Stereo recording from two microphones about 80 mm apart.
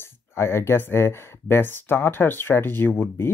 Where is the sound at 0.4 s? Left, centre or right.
Left.